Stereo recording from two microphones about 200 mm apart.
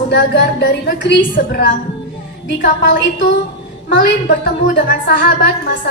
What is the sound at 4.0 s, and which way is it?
A woman's voice, 55° left (ahead or behind).